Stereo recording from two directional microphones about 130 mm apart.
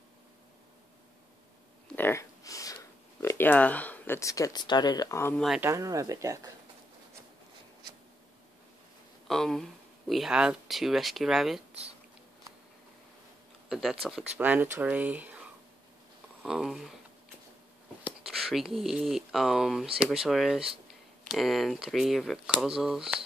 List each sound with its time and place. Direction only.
2.0 s a sound: 20° left (ahead or behind)
5.6 s speech: 25° right (ahead or behind)
9.3 s speech: 5° left (ahead or behind)
13.7 s speech: centre (ahead or behind)
14.4 s speech: 15° right (ahead or behind)
16.4 s speech: centre (ahead or behind)
18.0 s speech: 5° right (ahead or behind)